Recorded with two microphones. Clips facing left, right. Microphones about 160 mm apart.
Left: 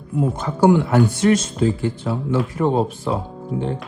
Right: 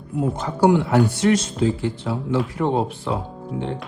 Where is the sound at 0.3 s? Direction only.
50° left (ahead or behind).